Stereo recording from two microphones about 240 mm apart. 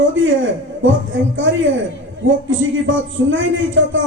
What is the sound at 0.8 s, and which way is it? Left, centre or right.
A man's voice, right.